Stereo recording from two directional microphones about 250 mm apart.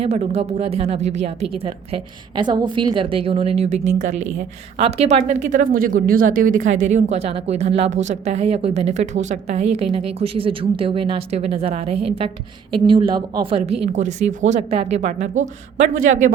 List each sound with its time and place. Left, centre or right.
0.0 s a woman's voice: right
4.1 s a woman's voice: right
4.4 s a woman's voice: right